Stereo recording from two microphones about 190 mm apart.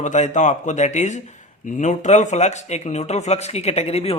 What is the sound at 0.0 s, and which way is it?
Speech, 40° left (ahead or behind).